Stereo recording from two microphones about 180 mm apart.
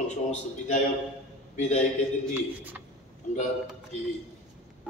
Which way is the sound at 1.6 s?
40° left (ahead or behind).